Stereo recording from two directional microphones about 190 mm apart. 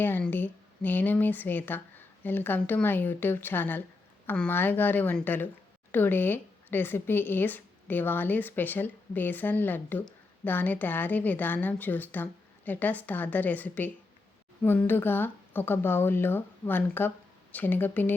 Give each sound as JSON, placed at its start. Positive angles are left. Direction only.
{"t": 0.0, "sound": "speech", "side_deg": 10}